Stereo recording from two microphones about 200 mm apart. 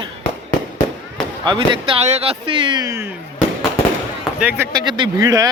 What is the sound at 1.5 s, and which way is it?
Speech, 25° right (ahead or behind).